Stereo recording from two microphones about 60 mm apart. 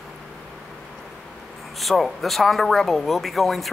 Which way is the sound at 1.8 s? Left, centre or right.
Centre.